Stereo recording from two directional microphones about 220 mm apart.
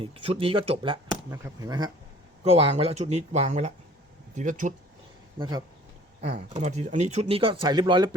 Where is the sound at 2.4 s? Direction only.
25° right (ahead or behind).